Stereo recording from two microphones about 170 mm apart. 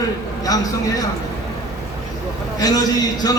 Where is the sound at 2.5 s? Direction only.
20° left (ahead or behind).